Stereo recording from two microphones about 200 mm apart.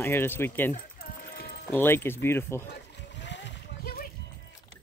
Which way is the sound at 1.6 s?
10° left (ahead or behind).